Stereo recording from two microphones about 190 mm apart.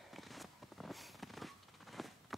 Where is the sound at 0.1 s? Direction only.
Centre (ahead or behind).